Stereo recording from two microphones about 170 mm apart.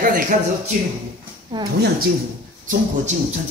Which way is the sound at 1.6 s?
25° right (ahead or behind).